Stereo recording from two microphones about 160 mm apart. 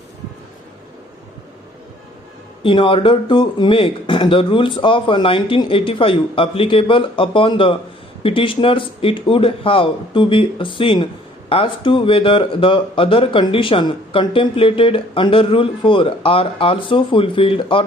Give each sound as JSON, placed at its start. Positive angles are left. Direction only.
{"t": 2.6, "sound": "a man's voice", "side_deg": 35}